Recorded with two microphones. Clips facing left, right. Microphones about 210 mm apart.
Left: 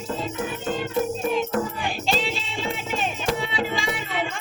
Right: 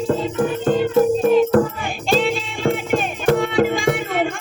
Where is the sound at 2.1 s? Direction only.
50° right (ahead or behind).